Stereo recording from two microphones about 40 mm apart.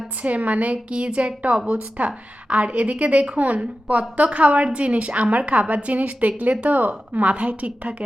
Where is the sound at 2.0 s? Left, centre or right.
Right.